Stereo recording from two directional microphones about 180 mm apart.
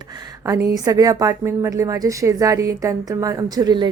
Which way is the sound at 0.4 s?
15° right (ahead or behind).